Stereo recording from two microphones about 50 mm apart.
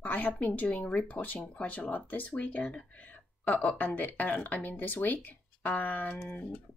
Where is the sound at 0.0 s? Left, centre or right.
Left.